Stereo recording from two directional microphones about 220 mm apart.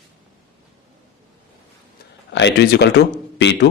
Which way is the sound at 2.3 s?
50° left (ahead or behind).